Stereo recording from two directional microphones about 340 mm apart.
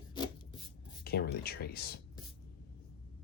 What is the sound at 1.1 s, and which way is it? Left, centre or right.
Speech, left.